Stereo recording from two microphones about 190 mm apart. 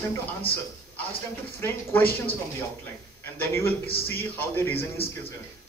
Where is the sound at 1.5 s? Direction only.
10° left (ahead or behind).